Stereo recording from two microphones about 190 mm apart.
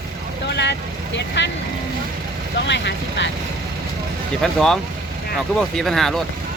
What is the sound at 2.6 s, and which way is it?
Speech, 65° left (ahead or behind).